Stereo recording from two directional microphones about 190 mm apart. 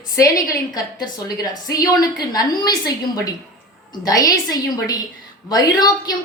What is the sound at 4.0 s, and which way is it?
A woman's voice, 20° left (ahead or behind).